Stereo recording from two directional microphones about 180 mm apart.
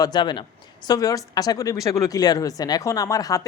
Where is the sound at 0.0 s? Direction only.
25° left (ahead or behind).